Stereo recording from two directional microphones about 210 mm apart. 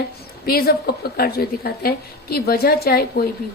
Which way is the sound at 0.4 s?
45° left (ahead or behind).